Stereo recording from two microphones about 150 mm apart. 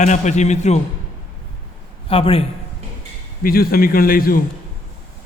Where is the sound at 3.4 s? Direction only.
80° left.